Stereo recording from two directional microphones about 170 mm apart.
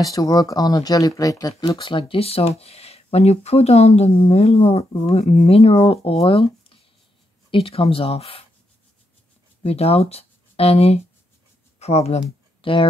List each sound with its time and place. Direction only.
0.0 s speech: 20° left (ahead or behind)
9.6 s speech: 35° left (ahead or behind)